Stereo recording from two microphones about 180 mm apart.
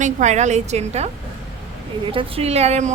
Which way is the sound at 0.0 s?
40° right (ahead or behind).